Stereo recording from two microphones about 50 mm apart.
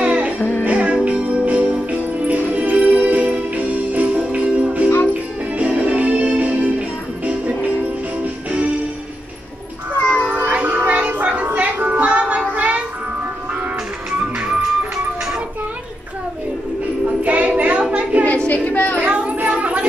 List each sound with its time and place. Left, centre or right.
0.0 s music: right
0.4 s music: left
0.7 s music: right
9.9 s music: left
10.5 s music: right
12.4 s a sound: right
14.2 s music: right
17.0 s music: right
17.5 s a sound: right
18.4 s child singing: left
18.9 s a sound: right